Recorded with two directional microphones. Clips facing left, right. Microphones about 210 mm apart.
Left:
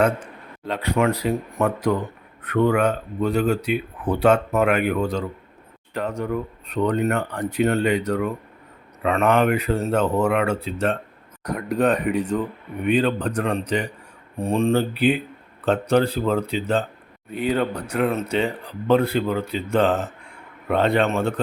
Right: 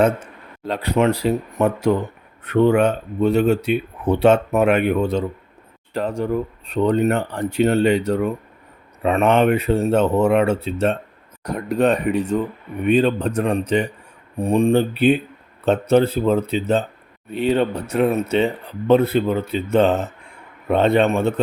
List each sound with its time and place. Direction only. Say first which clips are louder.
0.7 s speech: right 3 dB; 35° right (ahead or behind)